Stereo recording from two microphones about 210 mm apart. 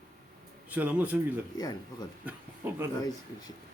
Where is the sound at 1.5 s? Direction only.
20° left (ahead or behind).